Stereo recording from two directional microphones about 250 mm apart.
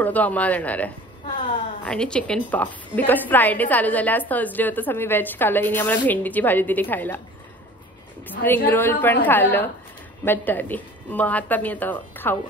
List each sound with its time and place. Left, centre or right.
0.0 s a woman's voice: centre
8.5 s a woman's voice: centre